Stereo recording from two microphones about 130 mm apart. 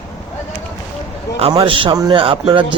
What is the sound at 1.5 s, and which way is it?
Speech, 40° right (ahead or behind).